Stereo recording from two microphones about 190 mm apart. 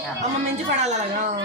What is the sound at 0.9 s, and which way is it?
Speech, 40° right (ahead or behind).